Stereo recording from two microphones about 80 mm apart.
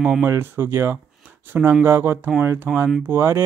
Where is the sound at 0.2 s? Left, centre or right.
Right.